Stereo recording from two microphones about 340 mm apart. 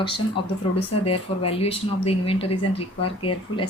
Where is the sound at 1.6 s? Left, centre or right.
Centre.